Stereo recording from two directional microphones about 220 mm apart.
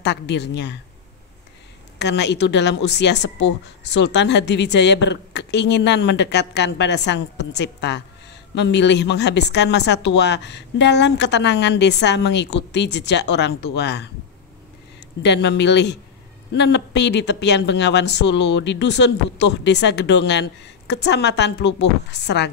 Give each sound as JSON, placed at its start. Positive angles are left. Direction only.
{"t": 0.0, "sound": "speech", "side_deg": 50}
{"t": 2.0, "sound": "speech", "side_deg": 50}
{"t": 15.2, "sound": "speech", "side_deg": 50}